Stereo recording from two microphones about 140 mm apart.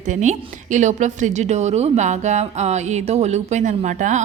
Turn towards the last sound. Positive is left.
turn(degrees=-60)  # may be behind; listen again after turning